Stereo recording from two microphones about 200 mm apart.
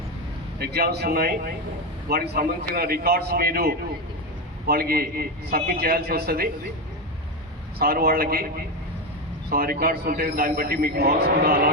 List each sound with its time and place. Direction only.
0.6 s a man's voice: 50° right (ahead or behind)
7.8 s a man's voice: 50° right (ahead or behind)
9.5 s a man's voice: 45° right (ahead or behind)